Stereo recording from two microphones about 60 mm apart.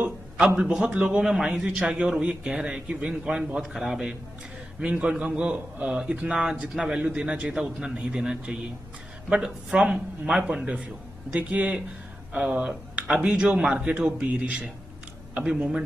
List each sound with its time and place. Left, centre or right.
0.8 s a man's voice: centre
14.0 s a man's voice: centre